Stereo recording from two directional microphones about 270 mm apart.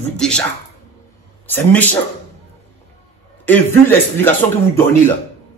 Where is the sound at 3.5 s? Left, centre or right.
Centre.